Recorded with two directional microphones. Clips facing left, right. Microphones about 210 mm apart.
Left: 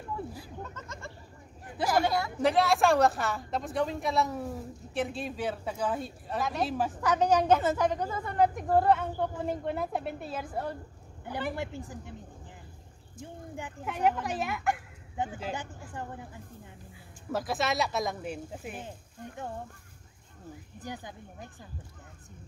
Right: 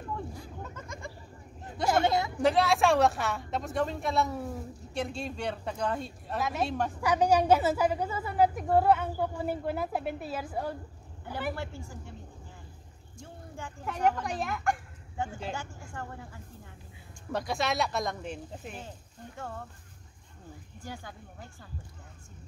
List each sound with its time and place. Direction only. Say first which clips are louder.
0.1 s a sound: left 1 dB; 5° left (ahead or behind)
0.6 s a sound: even; 10° right (ahead or behind)
2.0 s a woman's voice: right 2 dB; 20° right (ahead or behind)
2.4 s a woman's voice: even; centre (ahead or behind)
7.0 s a woman's voice: right 1 dB; 10° right (ahead or behind)
11.5 s speech: left 3 dB; 15° left (ahead or behind)
13.2 s speech: left 3 dB; 20° left (ahead or behind)
13.8 s a woman's voice: even; centre (ahead or behind)
15.5 s speech: left 1 dB; 20° left (ahead or behind)
17.3 s a woman's voice: left 1 dB; centre (ahead or behind)
20.8 s speech: left 2 dB; 20° left (ahead or behind)